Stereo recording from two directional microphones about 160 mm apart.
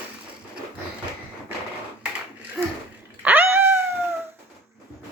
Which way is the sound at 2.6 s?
Centre (ahead or behind).